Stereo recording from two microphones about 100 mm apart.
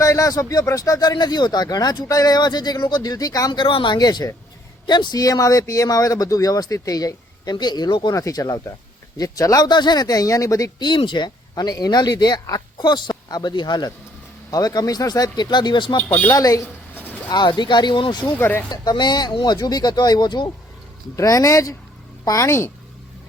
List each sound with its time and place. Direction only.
0.0 s speech: 35° left (ahead or behind)
3.6 s speech: 55° left (ahead or behind)
3.9 s speech: 45° left (ahead or behind)
8.0 s speech: 35° left (ahead or behind)
10.8 s speech: 55° left (ahead or behind)
16.0 s speech: 20° left (ahead or behind)
16.3 s speech: 35° left (ahead or behind)
16.9 s a sound: 15° left (ahead or behind)
17.2 s speech: 45° left (ahead or behind)
18.3 s speech: 20° left (ahead or behind)
18.7 s speech: 45° left (ahead or behind)
21.2 s speech: 35° left (ahead or behind)